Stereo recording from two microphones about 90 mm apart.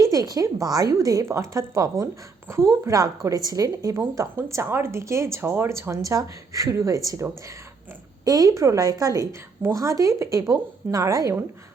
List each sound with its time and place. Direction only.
0.0 s a woman's voice: 40° right (ahead or behind)